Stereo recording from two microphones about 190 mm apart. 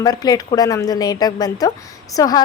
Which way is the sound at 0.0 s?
20° left (ahead or behind).